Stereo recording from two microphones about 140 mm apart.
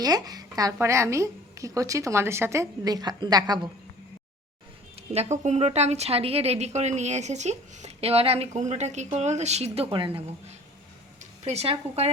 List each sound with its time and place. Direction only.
0.0 s a woman's voice: 25° right (ahead or behind)
4.9 s speech: 50° right (ahead or behind)
11.2 s speech: 50° right (ahead or behind)